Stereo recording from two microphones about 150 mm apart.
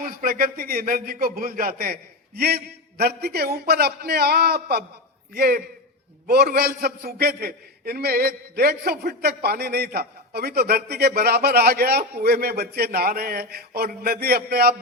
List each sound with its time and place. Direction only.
0.0 s a man's voice: 70° right (ahead or behind); by 14.8 s 90° right